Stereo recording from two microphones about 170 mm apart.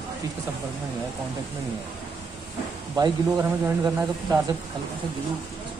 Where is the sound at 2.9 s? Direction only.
20° right (ahead or behind).